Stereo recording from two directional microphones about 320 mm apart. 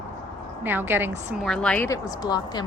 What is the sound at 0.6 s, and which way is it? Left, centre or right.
A woman's voice, centre.